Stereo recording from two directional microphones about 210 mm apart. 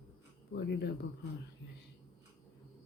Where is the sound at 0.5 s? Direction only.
50° left (ahead or behind).